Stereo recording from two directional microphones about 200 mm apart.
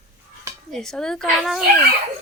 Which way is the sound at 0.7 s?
5° left (ahead or behind).